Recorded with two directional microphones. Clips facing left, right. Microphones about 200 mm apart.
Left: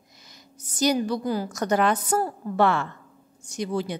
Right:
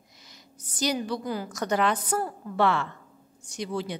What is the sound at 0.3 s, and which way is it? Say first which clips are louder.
A woman's voice: left 2 dB; 45° left (ahead or behind).